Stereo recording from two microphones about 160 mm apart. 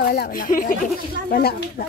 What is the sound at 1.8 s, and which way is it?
Speech, 65° left (ahead or behind).